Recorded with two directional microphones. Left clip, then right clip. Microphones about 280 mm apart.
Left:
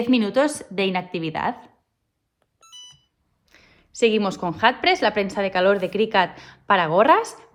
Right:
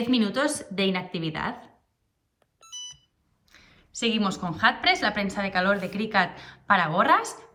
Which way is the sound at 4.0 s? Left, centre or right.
Left.